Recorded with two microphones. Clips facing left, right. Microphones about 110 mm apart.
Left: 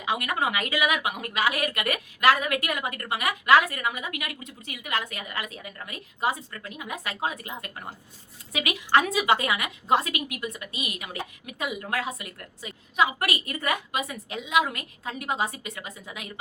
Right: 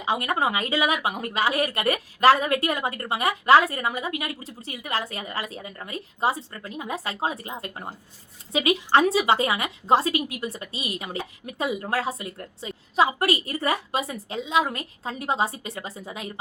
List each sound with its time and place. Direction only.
0.0 s a woman's voice: 30° right (ahead or behind)